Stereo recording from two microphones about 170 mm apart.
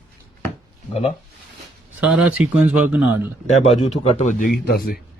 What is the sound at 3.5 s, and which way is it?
Speech, 40° left (ahead or behind).